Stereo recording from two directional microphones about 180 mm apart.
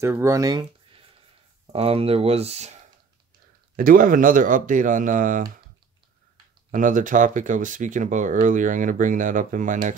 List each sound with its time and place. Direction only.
0.0 s speech: 15° right (ahead or behind)
1.7 s speech: 35° right (ahead or behind)
3.7 s speech: 50° right (ahead or behind)
6.7 s speech: 45° right (ahead or behind)